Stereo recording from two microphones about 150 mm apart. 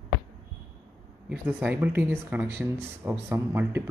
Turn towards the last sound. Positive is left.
turn(degrees=-15)  # may be behind; listen again after turning